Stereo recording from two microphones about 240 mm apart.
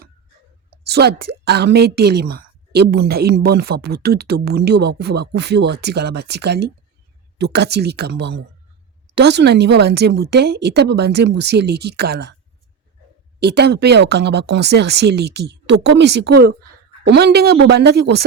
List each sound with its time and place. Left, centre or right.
0.9 s a woman's voice: right
13.4 s a woman's voice: right